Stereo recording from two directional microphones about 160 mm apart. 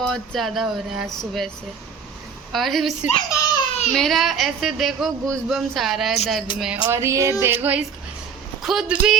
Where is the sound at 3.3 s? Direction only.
25° left (ahead or behind).